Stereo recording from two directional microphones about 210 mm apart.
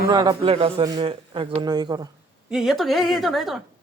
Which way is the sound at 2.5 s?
Centre (ahead or behind).